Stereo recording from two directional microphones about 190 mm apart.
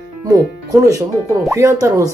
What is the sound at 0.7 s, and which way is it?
Speech, 15° right (ahead or behind).